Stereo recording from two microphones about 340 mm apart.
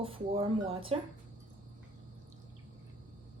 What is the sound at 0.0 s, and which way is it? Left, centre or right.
Speech, centre.